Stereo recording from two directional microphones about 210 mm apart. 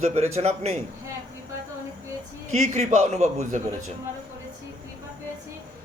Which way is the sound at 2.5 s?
35° right (ahead or behind).